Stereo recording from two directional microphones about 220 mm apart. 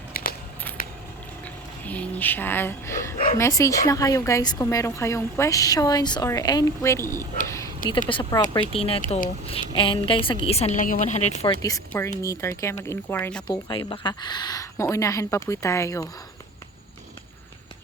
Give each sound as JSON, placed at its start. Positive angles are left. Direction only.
{"t": 0.1, "sound": "a sound", "side_deg": 40}
{"t": 1.8, "sound": "a woman's voice", "side_deg": 5}
{"t": 7.4, "sound": "a sound", "side_deg": 15}
{"t": 7.9, "sound": "speech", "side_deg": 20}
{"t": 11.6, "sound": "a woman's voice", "side_deg": 15}
{"t": 13.7, "sound": "a woman's voice", "side_deg": 20}